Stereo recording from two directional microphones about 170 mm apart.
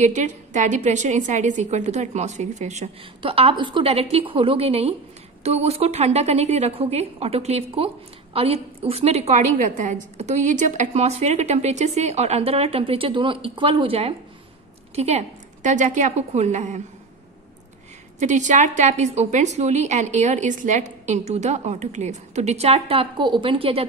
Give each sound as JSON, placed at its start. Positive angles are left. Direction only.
{"t": 0.0, "sound": "a woman's voice", "side_deg": -45}
{"t": 18.2, "sound": "a woman's voice", "side_deg": -45}